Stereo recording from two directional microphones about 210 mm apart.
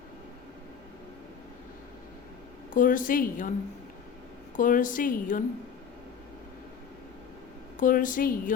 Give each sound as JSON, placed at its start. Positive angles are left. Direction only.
{"t": 2.7, "sound": "a woman's voice", "side_deg": 40}
{"t": 4.5, "sound": "a woman's voice", "side_deg": 40}
{"t": 7.8, "sound": "a woman's voice", "side_deg": 40}